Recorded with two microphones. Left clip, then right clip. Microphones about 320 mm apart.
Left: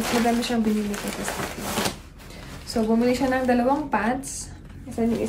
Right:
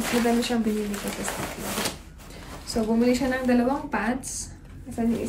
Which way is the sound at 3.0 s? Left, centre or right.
Centre.